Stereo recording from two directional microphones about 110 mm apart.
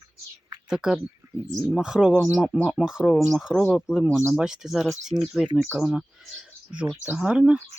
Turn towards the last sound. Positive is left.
turn(degrees=-10)  # may be behind; listen again after turning